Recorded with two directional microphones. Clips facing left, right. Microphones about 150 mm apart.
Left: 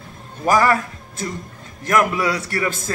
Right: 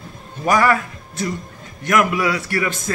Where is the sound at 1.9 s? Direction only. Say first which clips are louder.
Right 1 dB; 35° left (ahead or behind).